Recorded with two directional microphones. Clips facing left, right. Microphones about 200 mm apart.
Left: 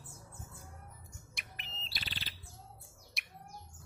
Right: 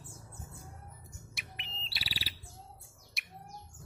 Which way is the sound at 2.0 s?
10° right (ahead or behind).